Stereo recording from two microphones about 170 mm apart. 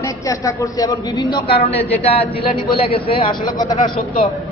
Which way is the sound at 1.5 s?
35° left (ahead or behind).